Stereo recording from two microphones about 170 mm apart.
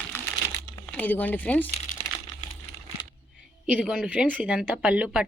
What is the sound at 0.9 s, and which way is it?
Speech, 10° left (ahead or behind).